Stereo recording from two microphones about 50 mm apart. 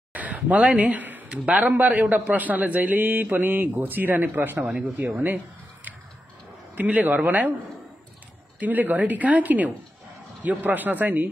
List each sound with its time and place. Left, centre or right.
0.1 s a sound: right
1.3 s a man's voice: right
4.6 s speech: centre
4.9 s a man's voice: right
6.7 s a man's voice: right
8.5 s a man's voice: right